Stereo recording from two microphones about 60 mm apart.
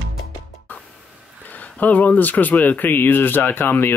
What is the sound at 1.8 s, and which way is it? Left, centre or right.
Speech, left.